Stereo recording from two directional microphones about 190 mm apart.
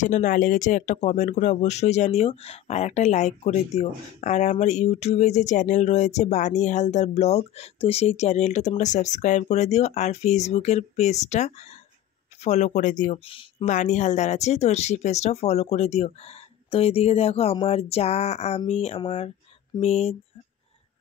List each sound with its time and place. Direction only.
0.0 s speech: 40° left (ahead or behind)
13.2 s speech: 30° left (ahead or behind)
13.7 s speech: 40° left (ahead or behind)